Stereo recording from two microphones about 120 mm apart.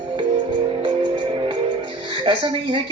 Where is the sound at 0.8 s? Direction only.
45° right (ahead or behind).